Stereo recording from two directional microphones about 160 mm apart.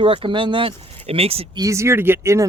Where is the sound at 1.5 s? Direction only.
20° right (ahead or behind).